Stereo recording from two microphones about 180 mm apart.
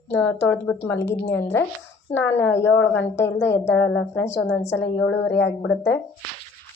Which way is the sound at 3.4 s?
75° left (ahead or behind).